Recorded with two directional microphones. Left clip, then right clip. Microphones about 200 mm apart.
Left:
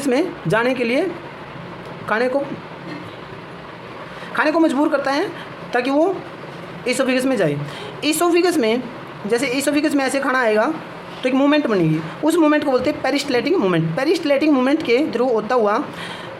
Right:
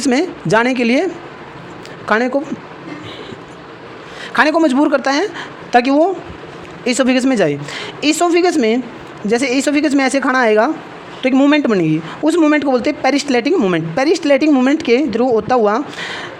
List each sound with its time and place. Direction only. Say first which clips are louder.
0.0 s a woman's voice: right 3 dB; 40° right (ahead or behind)
2.0 s a woman's voice: right 4 dB; 45° right (ahead or behind)
4.4 s a woman's voice: right 4 dB; 50° right (ahead or behind)
11.2 s a woman's voice: right 4 dB; 35° right (ahead or behind)